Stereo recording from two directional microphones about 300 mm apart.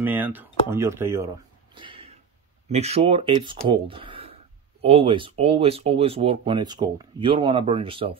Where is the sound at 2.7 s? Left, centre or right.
Right.